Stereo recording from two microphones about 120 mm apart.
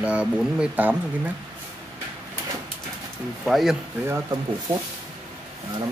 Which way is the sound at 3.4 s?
Centre (ahead or behind).